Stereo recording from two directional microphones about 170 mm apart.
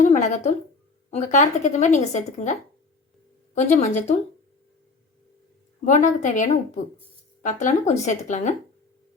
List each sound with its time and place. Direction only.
0.0 s a woman's voice: 45° left (ahead or behind)
5.8 s a woman's voice: 50° left (ahead or behind)